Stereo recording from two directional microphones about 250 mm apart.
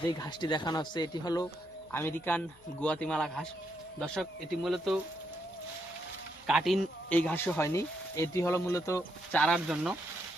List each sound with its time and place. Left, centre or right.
0.2 s speech: centre
6.5 s speech: centre